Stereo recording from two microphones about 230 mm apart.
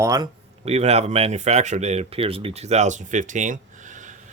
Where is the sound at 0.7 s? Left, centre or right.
Right.